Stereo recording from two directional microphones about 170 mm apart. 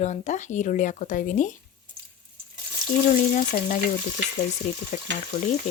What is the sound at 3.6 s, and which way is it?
Speech, 50° left (ahead or behind).